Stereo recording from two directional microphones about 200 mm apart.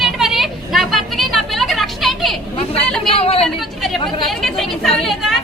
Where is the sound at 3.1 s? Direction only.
30° left (ahead or behind).